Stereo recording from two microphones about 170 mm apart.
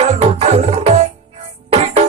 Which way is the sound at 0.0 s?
35° right (ahead or behind).